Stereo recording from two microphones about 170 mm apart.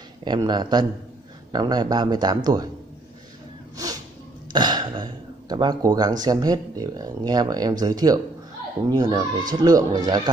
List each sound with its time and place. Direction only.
0.2 s speech: 25° right (ahead or behind)
3.7 s a sound: 20° right (ahead or behind)
4.5 s speech: 25° right (ahead or behind)